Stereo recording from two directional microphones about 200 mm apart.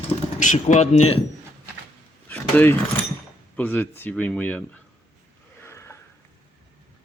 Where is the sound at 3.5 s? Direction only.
10° left (ahead or behind).